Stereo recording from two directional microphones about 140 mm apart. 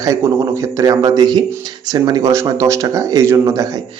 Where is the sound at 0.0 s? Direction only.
20° right (ahead or behind).